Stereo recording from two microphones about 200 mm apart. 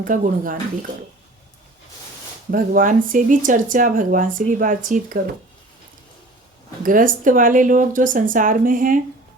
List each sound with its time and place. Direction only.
0.0 s speech: 45° right (ahead or behind)
2.5 s speech: 45° right (ahead or behind)
6.8 s speech: 40° right (ahead or behind)